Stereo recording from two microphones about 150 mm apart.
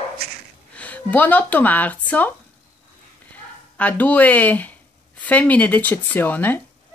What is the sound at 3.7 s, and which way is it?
Speech, 10° left (ahead or behind).